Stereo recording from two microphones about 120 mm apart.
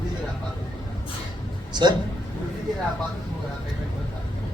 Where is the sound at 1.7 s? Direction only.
40° right (ahead or behind).